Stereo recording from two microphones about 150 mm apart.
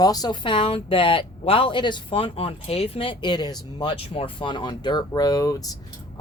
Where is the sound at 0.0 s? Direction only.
25° left (ahead or behind).